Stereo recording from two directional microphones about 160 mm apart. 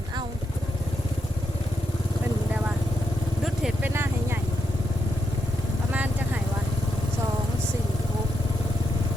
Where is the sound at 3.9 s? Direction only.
15° right (ahead or behind).